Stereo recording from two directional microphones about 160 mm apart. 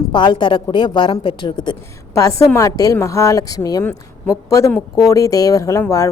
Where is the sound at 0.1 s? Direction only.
30° left (ahead or behind).